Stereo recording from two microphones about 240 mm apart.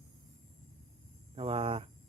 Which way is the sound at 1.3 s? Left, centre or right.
Right.